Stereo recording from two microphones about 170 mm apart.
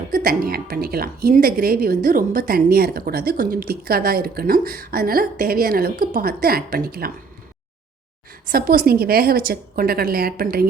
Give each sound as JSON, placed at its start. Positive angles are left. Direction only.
{"t": 0.1, "sound": "a woman's voice", "side_deg": -55}
{"t": 8.4, "sound": "a woman's voice", "side_deg": -60}